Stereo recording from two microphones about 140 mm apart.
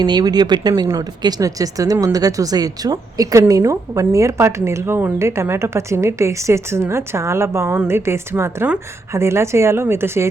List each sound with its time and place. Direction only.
0.0 s speech: 30° right (ahead or behind)